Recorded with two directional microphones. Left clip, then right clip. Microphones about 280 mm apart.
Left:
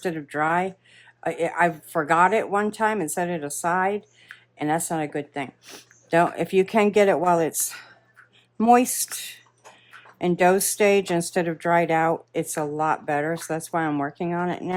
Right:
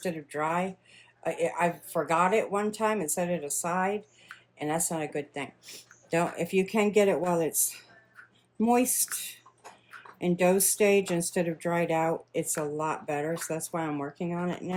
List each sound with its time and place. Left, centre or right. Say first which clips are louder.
0.0 s speech: left 6 dB; left